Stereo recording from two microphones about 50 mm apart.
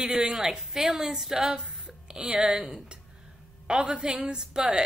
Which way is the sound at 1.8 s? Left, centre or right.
Centre.